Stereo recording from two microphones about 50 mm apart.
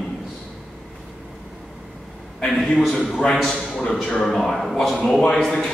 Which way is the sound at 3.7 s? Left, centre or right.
Left.